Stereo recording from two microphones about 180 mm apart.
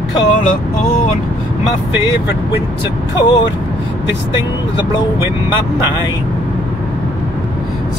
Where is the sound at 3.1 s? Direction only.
25° left (ahead or behind).